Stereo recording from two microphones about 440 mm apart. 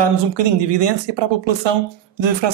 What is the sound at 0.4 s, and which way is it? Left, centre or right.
Speech, right.